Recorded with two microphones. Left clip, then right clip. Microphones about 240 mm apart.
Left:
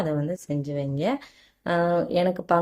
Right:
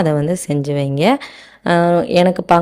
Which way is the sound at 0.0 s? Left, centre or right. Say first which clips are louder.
Right 11 dB; right.